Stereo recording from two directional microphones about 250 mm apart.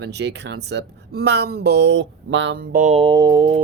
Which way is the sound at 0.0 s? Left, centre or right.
Right.